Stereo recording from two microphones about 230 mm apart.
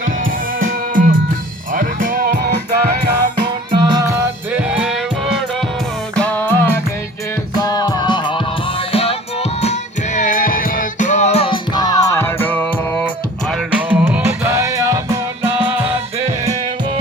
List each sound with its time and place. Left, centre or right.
0.6 s music: right
3.4 s music: centre
6.1 s music: centre; by 9.1 s left
10.2 s music: left; by 13.1 s centre
13.9 s music: centre